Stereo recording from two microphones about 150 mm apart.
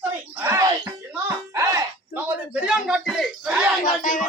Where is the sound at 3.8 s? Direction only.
60° left (ahead or behind).